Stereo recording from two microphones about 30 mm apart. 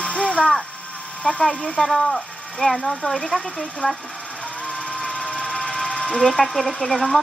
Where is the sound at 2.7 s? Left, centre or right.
Left.